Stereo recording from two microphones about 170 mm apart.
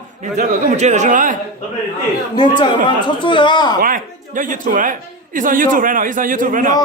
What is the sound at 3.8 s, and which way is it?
A man's voice, 50° right (ahead or behind).